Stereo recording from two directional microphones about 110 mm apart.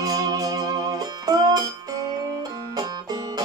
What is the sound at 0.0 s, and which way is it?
Music, 35° right (ahead or behind).